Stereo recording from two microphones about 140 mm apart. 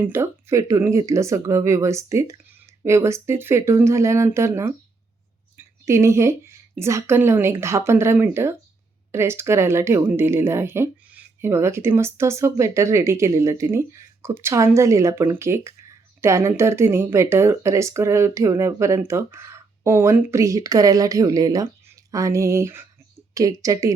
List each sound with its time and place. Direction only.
0.0 s a woman's voice: 20° right (ahead or behind)